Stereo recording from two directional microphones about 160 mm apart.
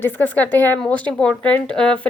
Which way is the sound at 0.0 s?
10° left (ahead or behind).